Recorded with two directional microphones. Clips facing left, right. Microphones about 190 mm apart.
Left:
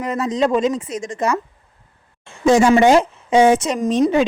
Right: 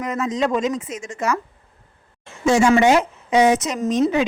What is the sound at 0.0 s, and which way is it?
A woman's voice, 35° left (ahead or behind).